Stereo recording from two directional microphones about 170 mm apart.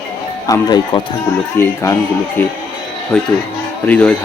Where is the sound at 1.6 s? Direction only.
15° left (ahead or behind).